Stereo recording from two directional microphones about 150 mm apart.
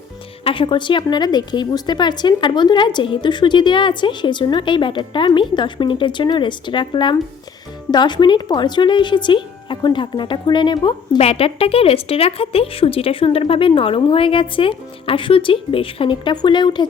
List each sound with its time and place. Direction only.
0.4 s a woman's voice: 35° left (ahead or behind)